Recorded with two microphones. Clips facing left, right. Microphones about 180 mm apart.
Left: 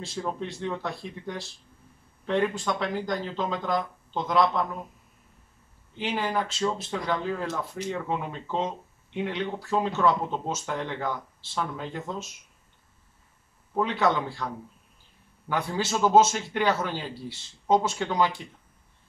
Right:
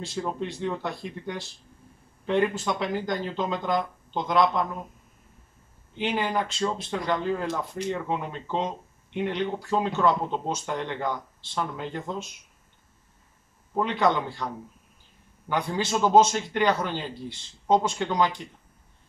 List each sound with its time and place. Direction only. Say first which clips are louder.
0.0 s speech: right 2 dB; centre (ahead or behind)
5.9 s speech: right 1 dB; centre (ahead or behind)
13.7 s speech: right 1 dB; centre (ahead or behind)